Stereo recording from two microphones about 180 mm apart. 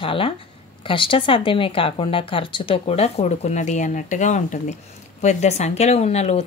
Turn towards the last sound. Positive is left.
turn(degrees=35)  # may be behind; listen again after turning